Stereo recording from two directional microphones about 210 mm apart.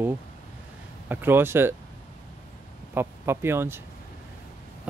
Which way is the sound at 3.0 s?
10° right (ahead or behind).